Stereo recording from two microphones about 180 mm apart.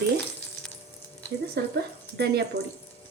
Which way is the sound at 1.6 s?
65° right (ahead or behind).